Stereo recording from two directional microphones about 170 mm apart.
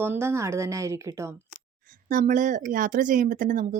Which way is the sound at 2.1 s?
50° right (ahead or behind).